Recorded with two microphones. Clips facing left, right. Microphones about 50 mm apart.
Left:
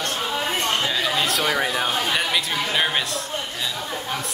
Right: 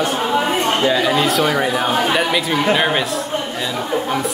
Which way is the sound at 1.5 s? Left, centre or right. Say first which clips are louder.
Right 5 dB; right.